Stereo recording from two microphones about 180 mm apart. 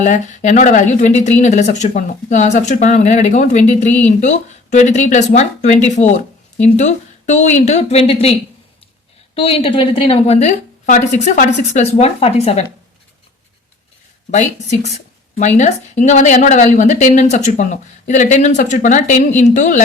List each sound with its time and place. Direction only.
0.0 s speech: 45° left (ahead or behind)
9.3 s speech: 30° left (ahead or behind)
14.3 s a woman's voice: 40° left (ahead or behind)